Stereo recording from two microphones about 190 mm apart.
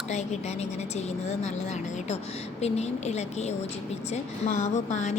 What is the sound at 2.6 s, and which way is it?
A woman's voice, 35° left (ahead or behind).